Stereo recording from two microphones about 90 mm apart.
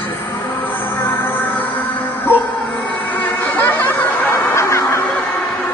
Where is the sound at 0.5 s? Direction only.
75° left (ahead or behind).